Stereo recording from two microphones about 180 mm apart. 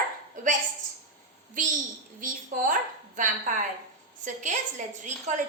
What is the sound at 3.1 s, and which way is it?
A woman's voice, 45° right (ahead or behind).